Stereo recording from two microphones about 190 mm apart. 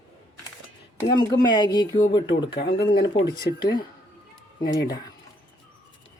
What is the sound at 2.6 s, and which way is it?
Speech, 60° left (ahead or behind).